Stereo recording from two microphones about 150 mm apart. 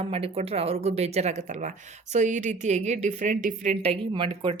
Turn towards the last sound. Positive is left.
turn(degrees=-35)  # may be behind; listen again after turning